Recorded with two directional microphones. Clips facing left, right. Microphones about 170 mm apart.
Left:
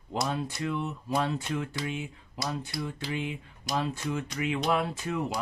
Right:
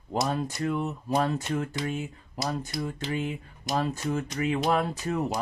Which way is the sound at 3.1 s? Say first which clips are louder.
Right 3 dB; 45° right (ahead or behind).